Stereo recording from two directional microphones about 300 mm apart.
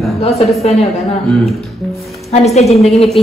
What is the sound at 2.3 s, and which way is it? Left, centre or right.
Speech, left.